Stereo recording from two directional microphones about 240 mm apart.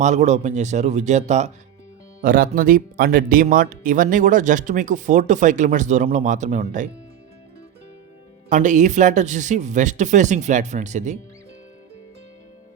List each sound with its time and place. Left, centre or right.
0.0 s speech: right
8.4 s speech: right